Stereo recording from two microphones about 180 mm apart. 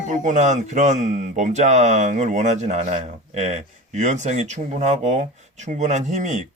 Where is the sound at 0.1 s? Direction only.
45° right (ahead or behind).